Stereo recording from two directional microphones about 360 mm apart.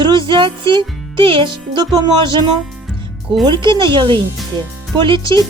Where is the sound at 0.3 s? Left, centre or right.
Centre.